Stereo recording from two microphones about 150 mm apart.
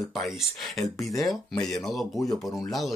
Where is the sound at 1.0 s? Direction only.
20° left (ahead or behind).